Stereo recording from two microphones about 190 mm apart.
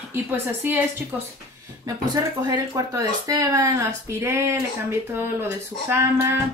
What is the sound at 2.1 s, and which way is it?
Speech, 15° right (ahead or behind).